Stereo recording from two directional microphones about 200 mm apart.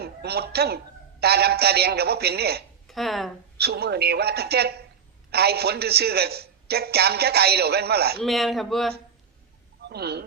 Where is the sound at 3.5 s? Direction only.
55° right (ahead or behind).